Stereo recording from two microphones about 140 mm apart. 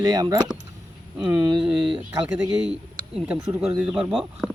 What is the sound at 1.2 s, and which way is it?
Speech, 10° right (ahead or behind).